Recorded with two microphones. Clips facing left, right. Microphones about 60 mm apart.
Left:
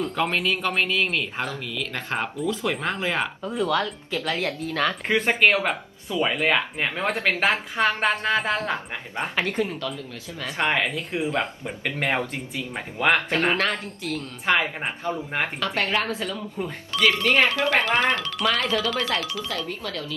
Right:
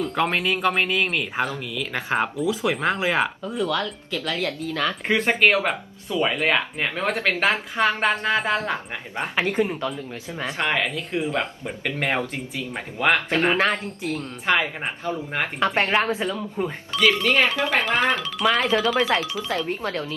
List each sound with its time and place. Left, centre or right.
0.3 s speech: centre
3.6 s speech: left
5.0 s speech: centre
10.6 s speech: centre
15.6 s speech: right
16.2 s speech: centre
17.0 s speech: centre
19.6 s speech: right